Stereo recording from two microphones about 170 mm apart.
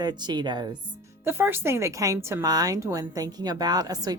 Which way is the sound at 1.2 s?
15° right (ahead or behind).